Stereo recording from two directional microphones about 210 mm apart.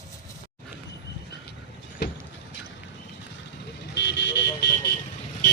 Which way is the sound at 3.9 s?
55° left (ahead or behind).